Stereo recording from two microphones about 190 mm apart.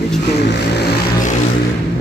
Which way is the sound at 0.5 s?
60° left (ahead or behind).